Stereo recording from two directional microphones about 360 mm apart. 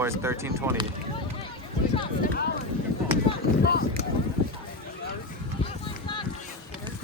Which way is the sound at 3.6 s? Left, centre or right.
Left.